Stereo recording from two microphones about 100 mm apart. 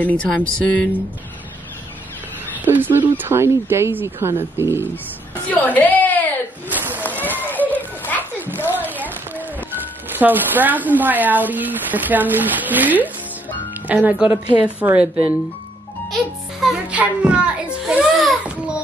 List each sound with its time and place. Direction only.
0.0 s speech: 10° left (ahead or behind)
2.6 s speech: 20° right (ahead or behind)
5.5 s a woman's voice: 15° left (ahead or behind)
6.7 s a sound: 20° right (ahead or behind)
7.0 s children playing: 20° left (ahead or behind)
8.4 s a sound: 20° right (ahead or behind)
10.0 s a woman's voice: 20° right (ahead or behind)
16.9 s a woman's voice: 15° right (ahead or behind)